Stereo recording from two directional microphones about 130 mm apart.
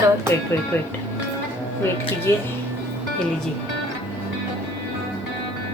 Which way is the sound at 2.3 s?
20° left (ahead or behind).